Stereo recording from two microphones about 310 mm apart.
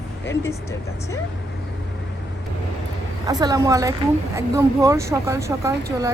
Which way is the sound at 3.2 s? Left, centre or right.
Centre.